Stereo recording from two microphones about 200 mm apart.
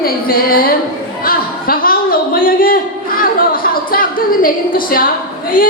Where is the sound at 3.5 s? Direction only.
45° left (ahead or behind).